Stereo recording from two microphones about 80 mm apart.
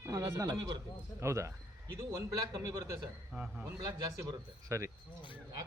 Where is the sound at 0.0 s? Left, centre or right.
Right.